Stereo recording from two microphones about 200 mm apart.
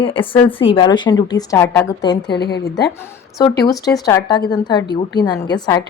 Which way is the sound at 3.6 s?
15° left (ahead or behind).